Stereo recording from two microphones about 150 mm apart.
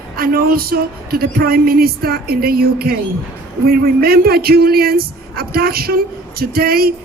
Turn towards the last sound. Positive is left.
turn(degrees=-85)